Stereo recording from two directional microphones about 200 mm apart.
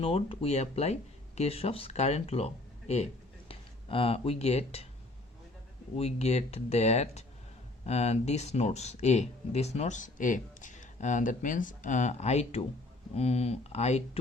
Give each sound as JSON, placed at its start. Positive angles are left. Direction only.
{"t": 0.0, "sound": "speech", "side_deg": 30}
{"t": 6.0, "sound": "speech", "side_deg": 35}